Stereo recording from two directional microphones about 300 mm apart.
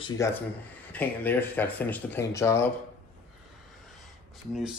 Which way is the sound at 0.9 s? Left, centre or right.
Centre.